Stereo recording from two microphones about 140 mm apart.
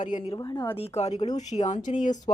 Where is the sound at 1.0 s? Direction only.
50° left (ahead or behind).